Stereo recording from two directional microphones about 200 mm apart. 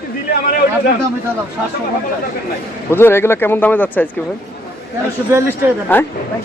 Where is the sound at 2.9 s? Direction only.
10° left (ahead or behind).